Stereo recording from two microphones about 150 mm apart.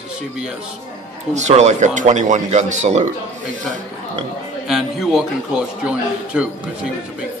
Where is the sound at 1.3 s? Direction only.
50° right (ahead or behind).